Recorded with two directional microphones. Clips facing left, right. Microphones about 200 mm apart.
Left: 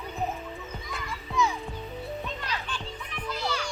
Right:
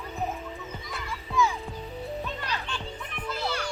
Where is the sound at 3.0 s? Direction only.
55° right (ahead or behind).